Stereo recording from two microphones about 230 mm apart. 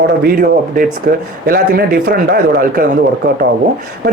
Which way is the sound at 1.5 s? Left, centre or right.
Right.